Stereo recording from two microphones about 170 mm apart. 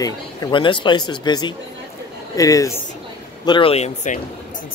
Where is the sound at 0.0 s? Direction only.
30° left (ahead or behind).